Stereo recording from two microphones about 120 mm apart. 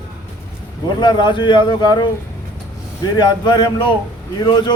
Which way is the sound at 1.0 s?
40° left (ahead or behind).